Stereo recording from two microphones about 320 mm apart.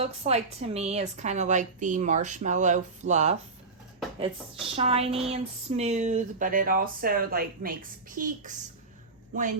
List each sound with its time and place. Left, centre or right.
0.0 s a woman's voice: centre
4.7 s a woman's voice: centre